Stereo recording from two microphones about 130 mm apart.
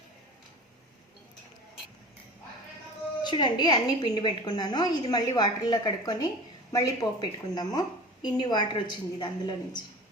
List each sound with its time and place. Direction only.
3.2 s a woman's voice: 35° left (ahead or behind)